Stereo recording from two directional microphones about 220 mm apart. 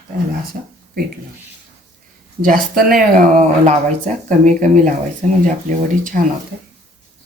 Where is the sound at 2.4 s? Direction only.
40° right (ahead or behind).